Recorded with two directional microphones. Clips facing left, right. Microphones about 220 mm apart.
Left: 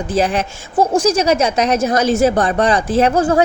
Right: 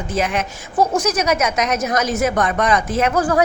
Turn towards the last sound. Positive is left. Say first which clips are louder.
# left 4 dB
turn(degrees=25)  # may be behind; listen again after turning